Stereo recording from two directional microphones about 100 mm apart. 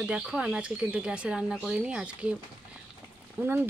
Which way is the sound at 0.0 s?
5° right (ahead or behind).